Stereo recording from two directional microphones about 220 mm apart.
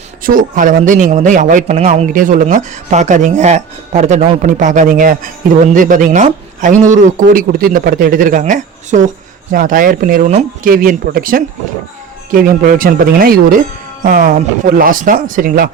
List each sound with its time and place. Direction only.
0.2 s speech: 40° right (ahead or behind)